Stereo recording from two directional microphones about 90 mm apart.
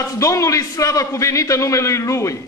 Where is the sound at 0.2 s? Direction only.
35° left (ahead or behind).